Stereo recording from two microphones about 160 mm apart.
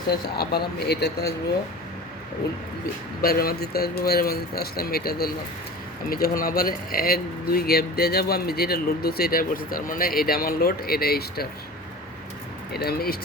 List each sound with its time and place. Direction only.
0.1 s speech: 80° left
3.2 s a man's voice: 65° left (ahead or behind)
12.7 s a man's voice: 75° left (ahead or behind)